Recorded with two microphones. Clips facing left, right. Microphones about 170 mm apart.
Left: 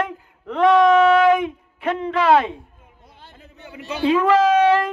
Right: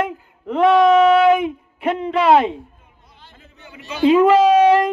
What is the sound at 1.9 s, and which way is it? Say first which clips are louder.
Speech: right 2 dB; 20° right (ahead or behind).